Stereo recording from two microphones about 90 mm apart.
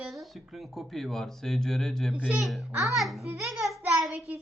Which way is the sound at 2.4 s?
Centre (ahead or behind).